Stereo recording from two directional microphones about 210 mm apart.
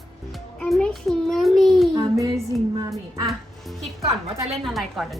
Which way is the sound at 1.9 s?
15° right (ahead or behind).